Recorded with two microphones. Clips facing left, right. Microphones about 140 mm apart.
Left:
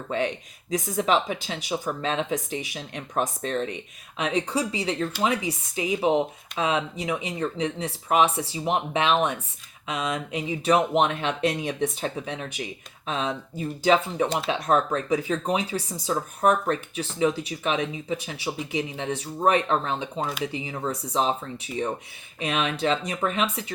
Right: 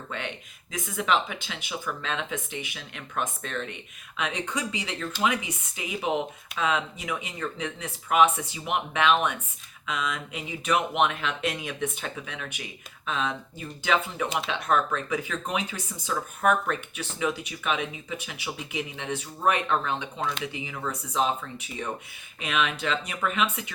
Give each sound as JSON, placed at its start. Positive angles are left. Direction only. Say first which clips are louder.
{"t": 0.1, "sound": "speech", "louder": "left 10 dB", "side_deg": 35}